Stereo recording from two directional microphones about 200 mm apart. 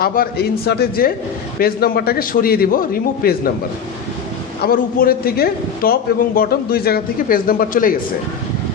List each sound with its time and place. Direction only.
0.0 s a man's voice: 50° left (ahead or behind)
4.6 s a man's voice: 50° left (ahead or behind)